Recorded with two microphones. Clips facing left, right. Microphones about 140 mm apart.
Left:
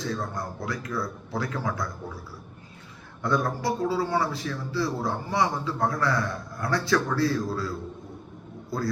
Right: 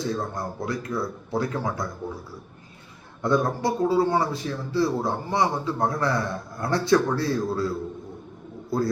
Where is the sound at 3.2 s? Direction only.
20° right (ahead or behind).